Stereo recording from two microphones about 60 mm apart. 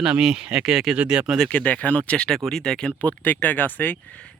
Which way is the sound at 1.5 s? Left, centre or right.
Left.